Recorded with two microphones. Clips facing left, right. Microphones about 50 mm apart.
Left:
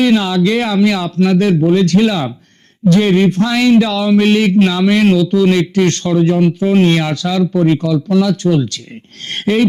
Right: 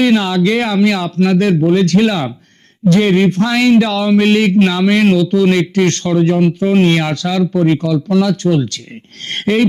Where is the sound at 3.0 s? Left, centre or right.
Right.